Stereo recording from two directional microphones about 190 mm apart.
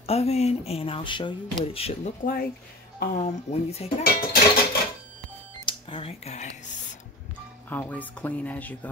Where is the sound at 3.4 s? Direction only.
35° left (ahead or behind).